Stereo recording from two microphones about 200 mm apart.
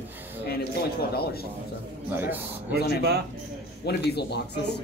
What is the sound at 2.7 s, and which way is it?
Speech, 55° right (ahead or behind).